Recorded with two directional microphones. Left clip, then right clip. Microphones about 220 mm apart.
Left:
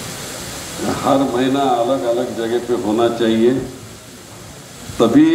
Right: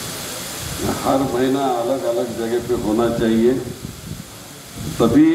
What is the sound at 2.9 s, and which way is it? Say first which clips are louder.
Speech: left 2 dB; 50° left (ahead or behind).